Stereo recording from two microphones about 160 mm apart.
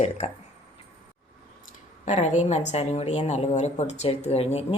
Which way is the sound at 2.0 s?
50° left (ahead or behind).